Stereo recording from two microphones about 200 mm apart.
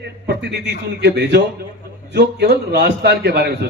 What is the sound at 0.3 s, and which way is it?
A man's voice, 55° right (ahead or behind).